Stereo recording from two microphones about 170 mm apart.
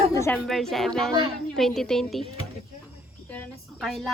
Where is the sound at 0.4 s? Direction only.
Centre (ahead or behind).